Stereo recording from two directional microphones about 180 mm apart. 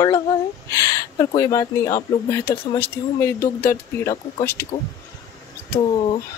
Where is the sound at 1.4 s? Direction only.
15° left (ahead or behind).